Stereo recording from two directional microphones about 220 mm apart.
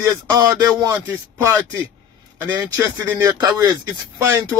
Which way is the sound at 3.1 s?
15° right (ahead or behind).